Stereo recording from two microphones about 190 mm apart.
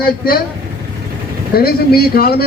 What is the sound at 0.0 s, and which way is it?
Speech, 55° left (ahead or behind).